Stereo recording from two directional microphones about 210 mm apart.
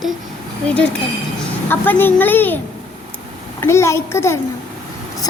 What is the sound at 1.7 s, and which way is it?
A child's voice, 10° left (ahead or behind).